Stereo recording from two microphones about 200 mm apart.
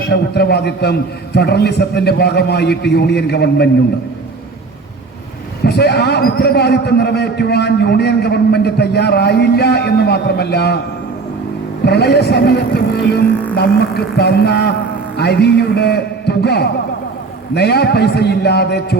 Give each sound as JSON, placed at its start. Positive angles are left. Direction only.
{"t": 0.1, "sound": "a man's voice", "side_deg": 55}
{"t": 5.6, "sound": "a man's voice", "side_deg": 55}
{"t": 11.9, "sound": "a man's voice", "side_deg": 55}